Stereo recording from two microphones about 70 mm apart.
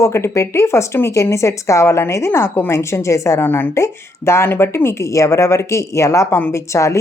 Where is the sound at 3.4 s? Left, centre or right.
Left.